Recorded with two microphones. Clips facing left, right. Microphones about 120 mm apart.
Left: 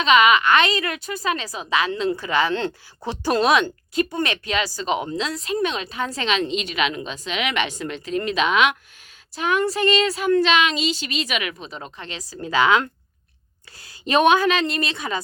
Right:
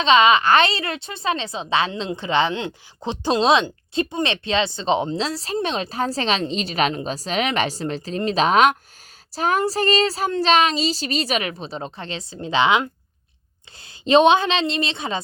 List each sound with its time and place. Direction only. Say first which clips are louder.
0.0 s a woman's voice: right 1 dB; 30° right (ahead or behind)